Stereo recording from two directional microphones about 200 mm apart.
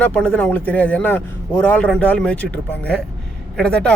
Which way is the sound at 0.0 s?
5° left (ahead or behind).